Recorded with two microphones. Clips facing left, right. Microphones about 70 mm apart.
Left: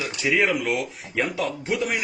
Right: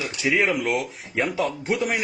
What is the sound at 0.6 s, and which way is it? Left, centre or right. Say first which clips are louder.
A man's voice: right 1 dB; right.